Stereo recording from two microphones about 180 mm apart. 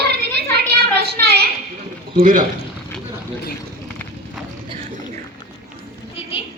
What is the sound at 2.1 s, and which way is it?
Speech, 50° right (ahead or behind).